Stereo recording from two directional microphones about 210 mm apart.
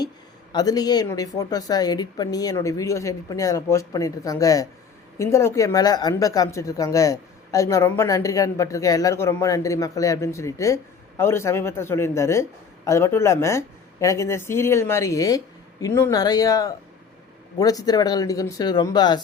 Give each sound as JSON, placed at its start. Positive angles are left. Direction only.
{"t": 0.5, "sound": "speech", "side_deg": 20}